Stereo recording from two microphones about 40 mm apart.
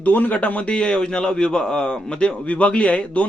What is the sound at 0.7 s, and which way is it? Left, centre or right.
A man's voice, left.